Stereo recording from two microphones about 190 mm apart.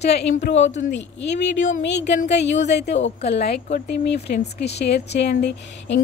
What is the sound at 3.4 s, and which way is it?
Speech, 60° left (ahead or behind).